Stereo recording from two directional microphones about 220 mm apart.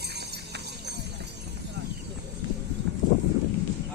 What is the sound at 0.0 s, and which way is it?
Music, 50° right (ahead or behind).